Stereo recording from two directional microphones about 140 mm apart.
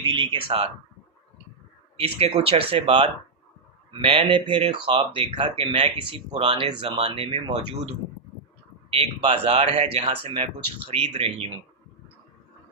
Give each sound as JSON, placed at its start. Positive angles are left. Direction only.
{"t": 0.0, "sound": "speech", "side_deg": -35}
{"t": 2.0, "sound": "speech", "side_deg": -40}
{"t": 9.0, "sound": "speech", "side_deg": -45}